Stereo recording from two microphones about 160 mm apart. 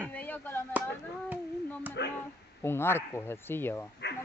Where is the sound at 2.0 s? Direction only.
90° left.